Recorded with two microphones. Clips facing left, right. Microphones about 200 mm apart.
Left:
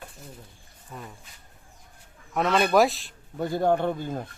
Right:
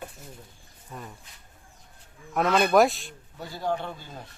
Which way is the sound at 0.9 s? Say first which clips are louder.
Even; centre (ahead or behind).